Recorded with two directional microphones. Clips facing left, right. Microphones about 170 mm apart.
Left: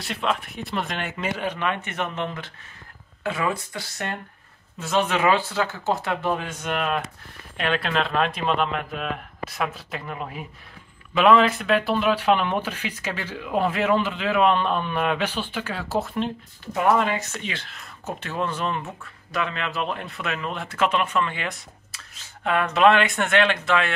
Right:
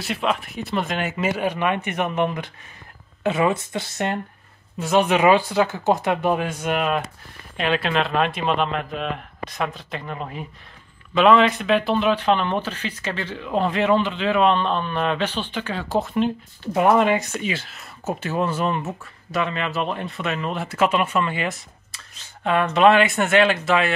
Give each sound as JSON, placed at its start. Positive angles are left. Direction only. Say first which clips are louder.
{"t": 0.0, "sound": "speech", "louder": "right 3 dB", "side_deg": -5}
{"t": 16.7, "sound": "speech", "louder": "right 4 dB", "side_deg": -20}